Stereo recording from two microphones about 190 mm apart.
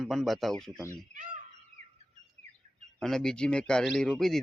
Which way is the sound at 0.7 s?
15° right (ahead or behind).